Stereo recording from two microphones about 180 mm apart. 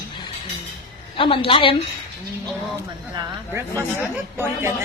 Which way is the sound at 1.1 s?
30° left (ahead or behind).